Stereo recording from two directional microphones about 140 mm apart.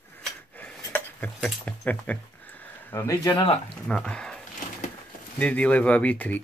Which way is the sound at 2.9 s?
25° left (ahead or behind).